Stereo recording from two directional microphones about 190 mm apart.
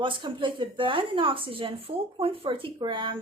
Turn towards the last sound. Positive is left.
turn(degrees=-25)  # may be behind; listen again after turning